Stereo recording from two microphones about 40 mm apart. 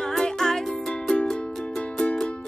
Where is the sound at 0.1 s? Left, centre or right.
Centre.